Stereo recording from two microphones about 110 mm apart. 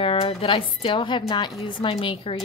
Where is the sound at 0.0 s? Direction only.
55° left (ahead or behind).